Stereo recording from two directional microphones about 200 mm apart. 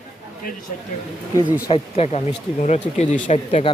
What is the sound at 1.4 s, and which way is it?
Speech, 10° right (ahead or behind).